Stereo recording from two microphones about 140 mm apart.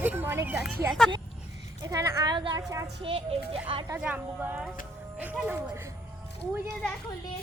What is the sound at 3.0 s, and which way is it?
Speech, 40° right (ahead or behind).